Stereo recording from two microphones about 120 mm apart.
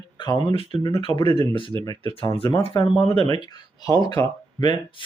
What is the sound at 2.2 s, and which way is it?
Speech, 45° left (ahead or behind).